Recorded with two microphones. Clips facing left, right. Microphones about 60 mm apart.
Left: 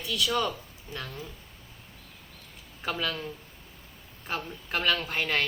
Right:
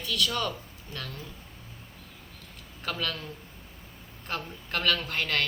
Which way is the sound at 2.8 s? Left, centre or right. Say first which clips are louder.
Left 2 dB; centre.